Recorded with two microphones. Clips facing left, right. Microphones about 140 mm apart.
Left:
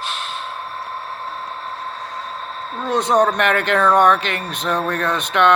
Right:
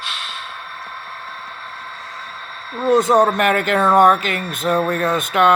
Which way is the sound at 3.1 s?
Centre (ahead or behind).